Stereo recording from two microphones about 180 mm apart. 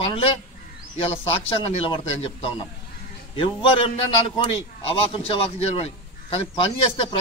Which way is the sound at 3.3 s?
30° left (ahead or behind).